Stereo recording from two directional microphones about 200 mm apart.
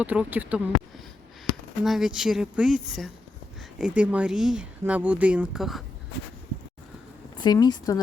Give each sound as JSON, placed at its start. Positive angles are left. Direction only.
{"t": 0.0, "sound": "speech", "side_deg": -10}
{"t": 7.3, "sound": "speech", "side_deg": 20}